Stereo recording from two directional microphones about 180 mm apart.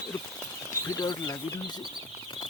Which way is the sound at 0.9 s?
20° left (ahead or behind).